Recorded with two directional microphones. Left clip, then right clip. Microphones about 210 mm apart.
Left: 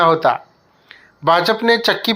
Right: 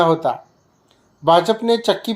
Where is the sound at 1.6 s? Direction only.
Centre (ahead or behind).